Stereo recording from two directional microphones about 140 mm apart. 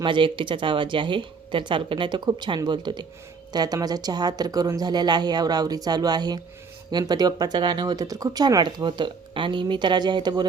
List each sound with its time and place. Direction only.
0.0 s speech: 35° right (ahead or behind)